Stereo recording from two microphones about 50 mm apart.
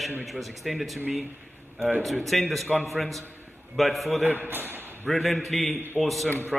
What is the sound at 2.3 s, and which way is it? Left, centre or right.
A man's voice, centre.